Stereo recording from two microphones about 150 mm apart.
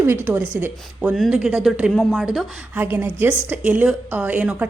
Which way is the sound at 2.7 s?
15° right (ahead or behind).